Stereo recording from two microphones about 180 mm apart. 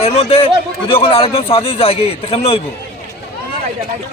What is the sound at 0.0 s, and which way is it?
A man's voice, 35° left (ahead or behind).